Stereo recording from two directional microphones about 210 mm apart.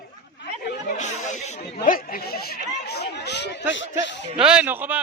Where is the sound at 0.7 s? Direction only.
40° left (ahead or behind); by 3.6 s 55° left (ahead or behind).